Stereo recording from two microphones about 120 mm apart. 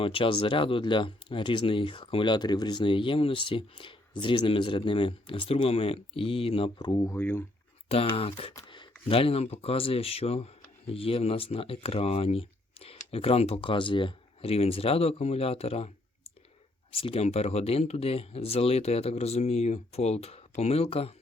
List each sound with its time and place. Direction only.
0.0 s speech: 50° left (ahead or behind)
6.7 s speech: 35° left (ahead or behind)
7.1 s speech: 20° left (ahead or behind)
7.9 s speech: 55° left (ahead or behind)
8.6 s speech: 40° left (ahead or behind)
16.9 s speech: 50° left (ahead or behind)